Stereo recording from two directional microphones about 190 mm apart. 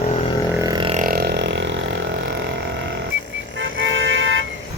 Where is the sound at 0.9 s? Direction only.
45° right (ahead or behind); by 1.9 s 70° right (ahead or behind).